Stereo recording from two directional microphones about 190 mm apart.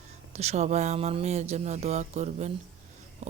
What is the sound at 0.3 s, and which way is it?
A woman's voice, 35° right (ahead or behind).